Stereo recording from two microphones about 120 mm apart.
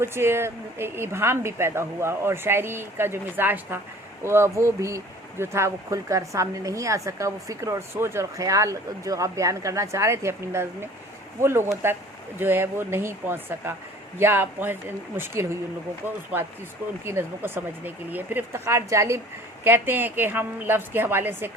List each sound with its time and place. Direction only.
0.0 s a woman's voice: 20° right (ahead or behind)